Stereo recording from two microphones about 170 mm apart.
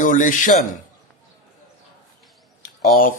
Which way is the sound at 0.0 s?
50° left (ahead or behind).